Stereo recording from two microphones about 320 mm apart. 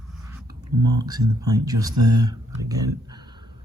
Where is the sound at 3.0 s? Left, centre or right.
Centre.